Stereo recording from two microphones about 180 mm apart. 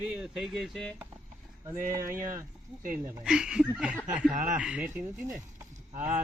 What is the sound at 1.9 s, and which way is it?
Speech, 15° right (ahead or behind).